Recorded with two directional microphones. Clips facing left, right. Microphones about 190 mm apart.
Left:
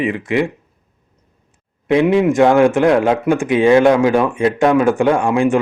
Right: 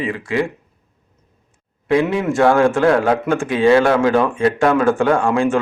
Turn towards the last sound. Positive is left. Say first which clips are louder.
# left 2 dB
turn(degrees=15)  # may be behind; listen again after turning